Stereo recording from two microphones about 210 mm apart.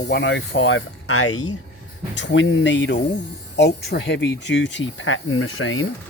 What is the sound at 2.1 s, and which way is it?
Speech, 60° left (ahead or behind).